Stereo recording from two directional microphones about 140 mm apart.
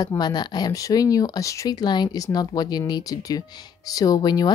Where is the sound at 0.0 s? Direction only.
30° left (ahead or behind).